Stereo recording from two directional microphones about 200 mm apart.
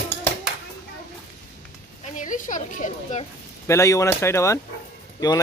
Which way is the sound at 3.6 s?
15° left (ahead or behind).